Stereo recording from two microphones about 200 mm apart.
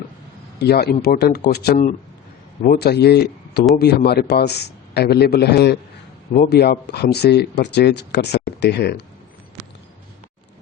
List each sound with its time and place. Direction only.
0.6 s a man's voice: 55° left (ahead or behind)